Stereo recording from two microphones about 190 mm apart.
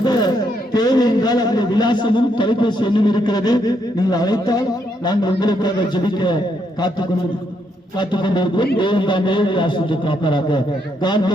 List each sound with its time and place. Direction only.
0.0 s speech: 20° left (ahead or behind)
7.9 s speech: 25° left (ahead or behind)